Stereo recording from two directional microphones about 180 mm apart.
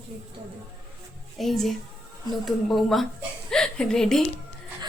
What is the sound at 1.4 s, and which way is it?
A woman's voice, centre (ahead or behind).